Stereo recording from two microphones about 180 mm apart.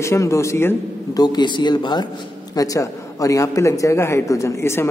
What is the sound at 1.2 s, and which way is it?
A man's voice, 25° left (ahead or behind).